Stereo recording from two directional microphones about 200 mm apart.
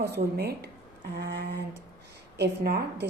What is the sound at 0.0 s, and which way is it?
A woman's voice, 55° right (ahead or behind).